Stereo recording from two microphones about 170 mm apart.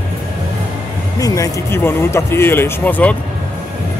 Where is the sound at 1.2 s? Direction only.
20° left (ahead or behind).